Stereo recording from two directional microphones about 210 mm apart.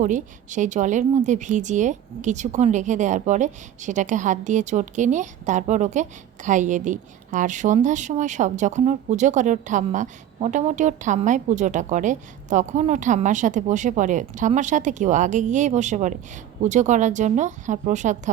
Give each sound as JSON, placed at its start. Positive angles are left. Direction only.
{"t": 0.0, "sound": "a woman's voice", "side_deg": -35}